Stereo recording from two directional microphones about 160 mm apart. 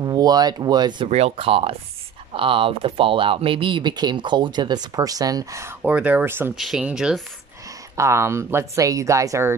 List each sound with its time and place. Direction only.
0.0 s speech: 25° right (ahead or behind)
1.1 s speech: 40° right (ahead or behind); by 6.5 s 15° right (ahead or behind)
6.5 s speech: centre (ahead or behind)
7.9 s speech: 20° right (ahead or behind)